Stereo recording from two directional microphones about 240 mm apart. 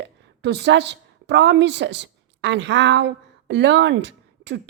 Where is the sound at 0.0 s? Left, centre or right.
Right.